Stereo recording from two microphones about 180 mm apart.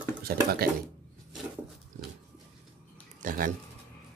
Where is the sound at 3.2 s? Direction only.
50° right (ahead or behind).